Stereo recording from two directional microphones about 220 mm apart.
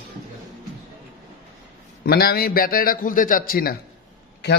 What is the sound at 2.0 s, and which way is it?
A man's voice, 45° left (ahead or behind).